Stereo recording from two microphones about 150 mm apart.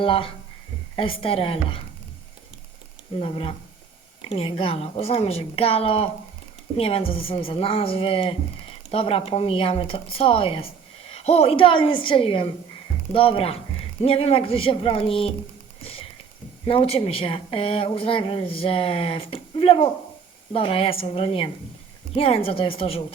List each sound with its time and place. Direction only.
0.0 s speech: 35° left (ahead or behind)
3.2 s speech: 35° left (ahead or behind)
15.8 s a sound: 40° left (ahead or behind)
16.6 s speech: 40° left (ahead or behind)